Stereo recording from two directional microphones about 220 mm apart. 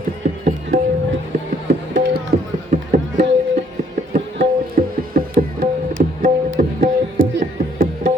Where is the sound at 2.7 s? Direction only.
35° right (ahead or behind).